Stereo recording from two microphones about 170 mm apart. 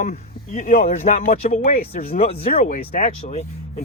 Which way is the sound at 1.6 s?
60° left (ahead or behind).